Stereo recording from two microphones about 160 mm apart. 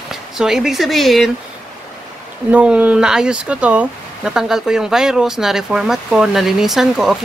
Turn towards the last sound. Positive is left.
turn(degrees=0)  # may be behind; listen again after turning